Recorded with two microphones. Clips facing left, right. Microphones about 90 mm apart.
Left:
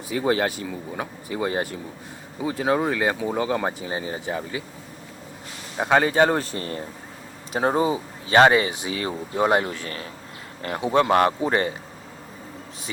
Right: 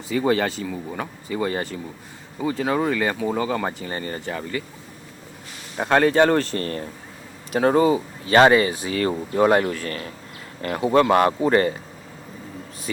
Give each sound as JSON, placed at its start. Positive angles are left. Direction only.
{"t": 0.1, "sound": "speech", "side_deg": 5}
{"t": 5.7, "sound": "speech", "side_deg": 5}